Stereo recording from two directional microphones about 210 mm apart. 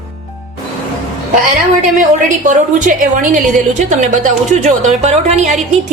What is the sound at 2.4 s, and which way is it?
A woman's voice, 40° right (ahead or behind).